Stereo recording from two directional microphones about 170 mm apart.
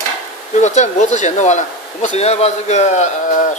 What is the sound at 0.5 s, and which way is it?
Speech, 45° left (ahead or behind).